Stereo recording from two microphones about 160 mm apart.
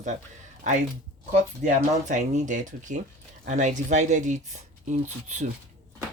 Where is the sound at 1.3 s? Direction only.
50° right (ahead or behind).